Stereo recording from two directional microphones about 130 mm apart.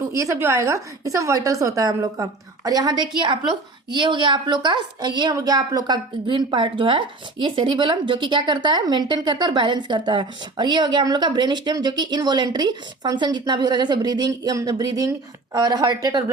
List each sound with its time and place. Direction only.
0.0 s a woman's voice: 25° right (ahead or behind)